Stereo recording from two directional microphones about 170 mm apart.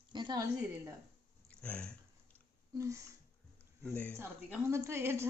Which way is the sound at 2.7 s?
20° right (ahead or behind).